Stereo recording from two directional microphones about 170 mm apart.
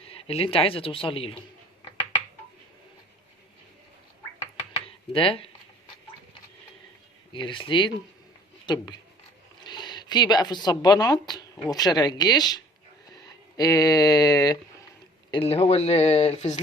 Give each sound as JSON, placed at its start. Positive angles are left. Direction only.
{"t": 0.1, "sound": "speech", "side_deg": 35}
{"t": 4.9, "sound": "computer keyboard", "side_deg": 30}
{"t": 7.3, "sound": "speech", "side_deg": 30}
{"t": 15.3, "sound": "speech", "side_deg": 35}